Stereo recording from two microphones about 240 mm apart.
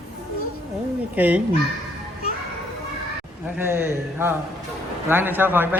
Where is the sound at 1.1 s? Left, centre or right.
Centre.